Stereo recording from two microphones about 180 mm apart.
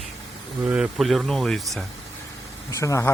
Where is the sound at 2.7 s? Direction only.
15° left (ahead or behind).